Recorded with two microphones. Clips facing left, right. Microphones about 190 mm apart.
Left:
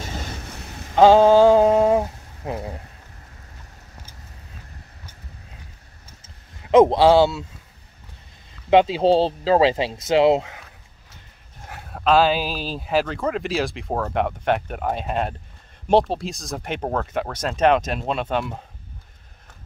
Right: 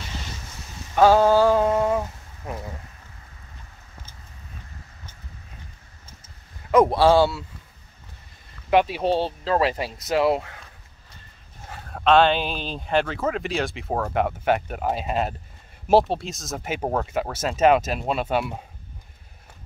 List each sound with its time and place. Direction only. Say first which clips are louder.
0.9 s a sound: left 4 dB; 20° left (ahead or behind)
6.7 s speech: left 3 dB; 20° left (ahead or behind)
8.6 s speech: left 4 dB; 25° left (ahead or behind)
11.6 s speech: even; 5° left (ahead or behind)